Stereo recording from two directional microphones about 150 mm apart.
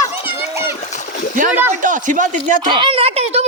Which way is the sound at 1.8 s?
60° right (ahead or behind).